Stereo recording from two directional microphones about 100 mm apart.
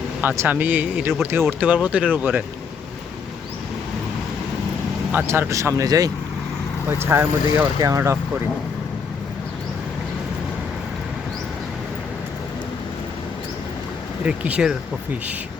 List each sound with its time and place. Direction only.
0.2 s speech: 20° right (ahead or behind)
5.1 s speech: 25° right (ahead or behind)
7.1 s speech: 30° right (ahead or behind)
14.3 s speech: 10° right (ahead or behind)